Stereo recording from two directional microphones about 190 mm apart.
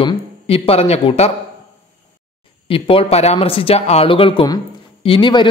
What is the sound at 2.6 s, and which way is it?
Speech, 30° left (ahead or behind).